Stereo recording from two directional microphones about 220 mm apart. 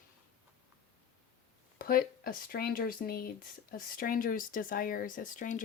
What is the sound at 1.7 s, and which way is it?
Speech, 40° left (ahead or behind).